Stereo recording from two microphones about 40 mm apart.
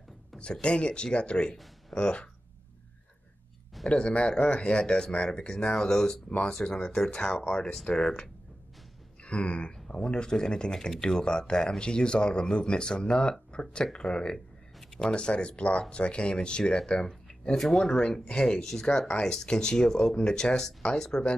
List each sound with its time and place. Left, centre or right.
0.4 s speech: left
3.9 s speech: left
5.7 s speech: centre
7.4 s speech: left
7.8 s speech: centre
9.2 s speech: left
17.6 s speech: centre
18.0 s speech: left
19.0 s speech: left